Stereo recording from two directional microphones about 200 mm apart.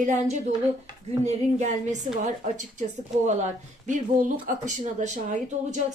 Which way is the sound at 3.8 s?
40° right (ahead or behind).